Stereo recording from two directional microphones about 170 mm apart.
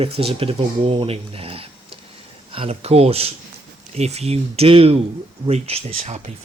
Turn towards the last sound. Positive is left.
turn(degrees=-40)  # may be behind; listen again after turning